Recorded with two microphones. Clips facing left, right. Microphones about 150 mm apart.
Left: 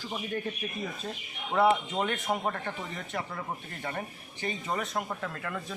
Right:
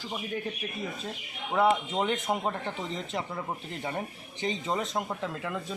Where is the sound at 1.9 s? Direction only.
15° right (ahead or behind).